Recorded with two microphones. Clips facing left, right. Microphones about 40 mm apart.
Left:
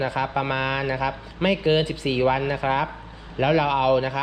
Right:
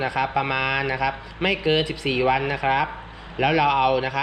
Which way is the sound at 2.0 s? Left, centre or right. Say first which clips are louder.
Even; right.